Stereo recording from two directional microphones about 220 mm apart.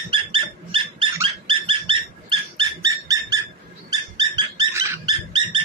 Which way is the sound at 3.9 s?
20° right (ahead or behind).